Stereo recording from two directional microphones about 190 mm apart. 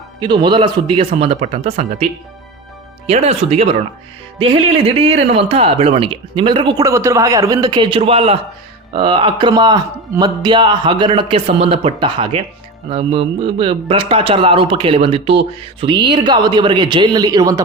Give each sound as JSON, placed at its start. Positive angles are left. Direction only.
{"t": 0.2, "sound": "speech", "side_deg": -25}
{"t": 3.1, "sound": "speech", "side_deg": -35}